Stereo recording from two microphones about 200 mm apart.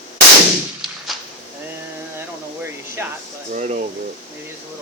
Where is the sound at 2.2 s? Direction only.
10° right (ahead or behind).